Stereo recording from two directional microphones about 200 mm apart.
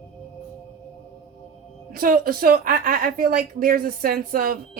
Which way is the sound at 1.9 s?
45° right (ahead or behind).